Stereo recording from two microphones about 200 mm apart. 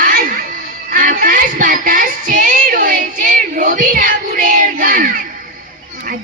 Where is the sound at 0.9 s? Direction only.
45° right (ahead or behind).